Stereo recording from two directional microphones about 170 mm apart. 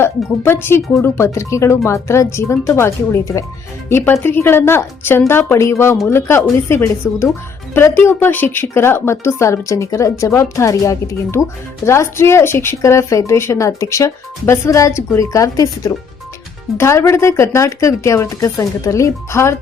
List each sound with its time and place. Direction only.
0.0 s a woman's voice: 15° left (ahead or behind)